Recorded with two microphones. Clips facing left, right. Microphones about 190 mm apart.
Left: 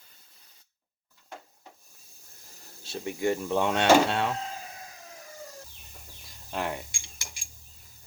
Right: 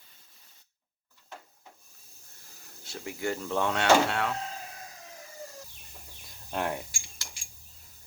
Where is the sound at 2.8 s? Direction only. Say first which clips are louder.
Left 5 dB; 25° left (ahead or behind).